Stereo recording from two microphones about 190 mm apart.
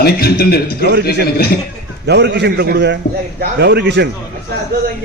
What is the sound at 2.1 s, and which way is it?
A man's voice, 65° right (ahead or behind).